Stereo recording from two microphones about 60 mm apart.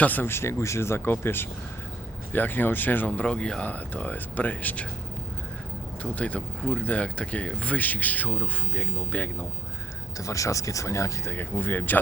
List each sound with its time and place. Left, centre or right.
0.0 s speech: left
0.3 s speech: left
3.1 s speech: centre
6.0 s speech: left
10.2 s speech: left
11.3 s speech: left